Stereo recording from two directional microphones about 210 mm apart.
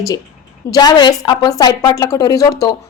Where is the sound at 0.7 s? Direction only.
20° left (ahead or behind).